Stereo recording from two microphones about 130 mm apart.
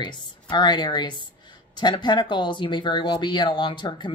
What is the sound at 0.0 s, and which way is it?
Speech, 35° left (ahead or behind).